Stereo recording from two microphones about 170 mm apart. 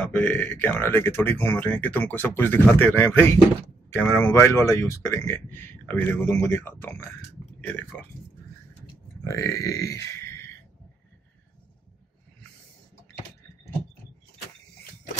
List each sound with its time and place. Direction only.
0.0 s speech: 5° left (ahead or behind)
9.2 s speech: 15° left (ahead or behind)